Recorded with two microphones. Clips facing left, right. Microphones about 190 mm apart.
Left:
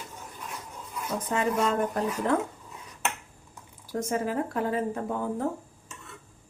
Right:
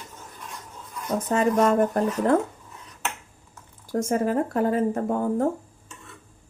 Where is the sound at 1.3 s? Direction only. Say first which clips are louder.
Right 6 dB; 45° right (ahead or behind).